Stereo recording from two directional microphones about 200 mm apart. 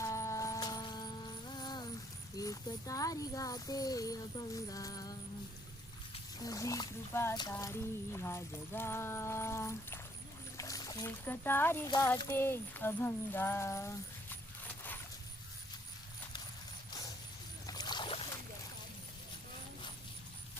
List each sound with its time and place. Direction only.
0.0 s music: 15° left (ahead or behind)
2.4 s speech: 15° left (ahead or behind)
6.4 s speech: 15° left (ahead or behind)
17.7 s rowboat: 20° left (ahead or behind)